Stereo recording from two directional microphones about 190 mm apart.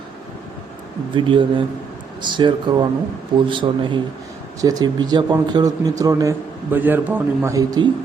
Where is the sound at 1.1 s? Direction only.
25° right (ahead or behind).